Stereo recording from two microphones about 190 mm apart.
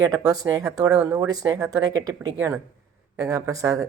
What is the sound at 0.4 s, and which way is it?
Speech, 20° right (ahead or behind).